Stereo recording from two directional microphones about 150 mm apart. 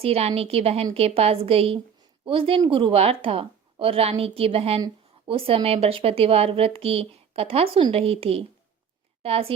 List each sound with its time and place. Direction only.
0.0 s speech: 40° right (ahead or behind)